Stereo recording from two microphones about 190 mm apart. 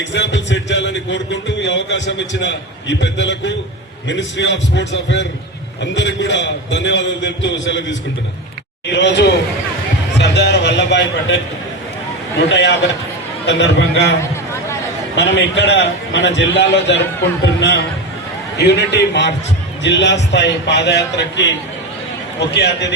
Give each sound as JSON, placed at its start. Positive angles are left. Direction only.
{"t": 0.0, "sound": "a man's voice", "side_deg": 70}
{"t": 8.9, "sound": "a man's voice", "side_deg": 65}
{"t": 10.2, "sound": "a sound", "side_deg": 65}
{"t": 12.5, "sound": "a man's voice", "side_deg": 65}
{"t": 15.1, "sound": "a man's voice", "side_deg": 65}